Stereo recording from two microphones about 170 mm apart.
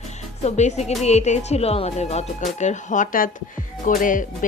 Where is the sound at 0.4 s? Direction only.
40° left (ahead or behind).